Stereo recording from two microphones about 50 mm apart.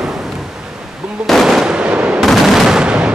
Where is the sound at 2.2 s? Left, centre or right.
Centre.